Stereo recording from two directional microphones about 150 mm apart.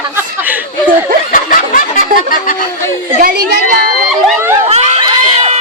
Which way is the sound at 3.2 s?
75° right (ahead or behind).